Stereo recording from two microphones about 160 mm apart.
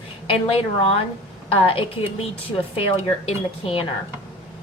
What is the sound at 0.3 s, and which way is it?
A woman's voice, 35° left (ahead or behind).